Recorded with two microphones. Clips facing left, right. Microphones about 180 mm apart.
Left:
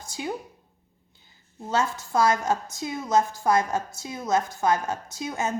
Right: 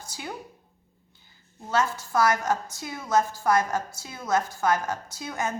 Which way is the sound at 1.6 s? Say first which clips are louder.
Even; 25° left (ahead or behind).